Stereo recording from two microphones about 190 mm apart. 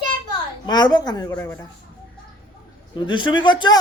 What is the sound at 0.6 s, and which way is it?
A child's voice, 20° left (ahead or behind).